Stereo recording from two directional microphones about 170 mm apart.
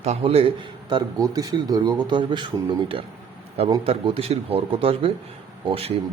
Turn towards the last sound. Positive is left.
turn(degrees=-35)  # may be behind; listen again after turning